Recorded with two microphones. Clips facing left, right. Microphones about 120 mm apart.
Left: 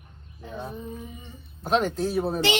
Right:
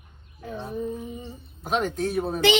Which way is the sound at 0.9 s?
30° right (ahead or behind).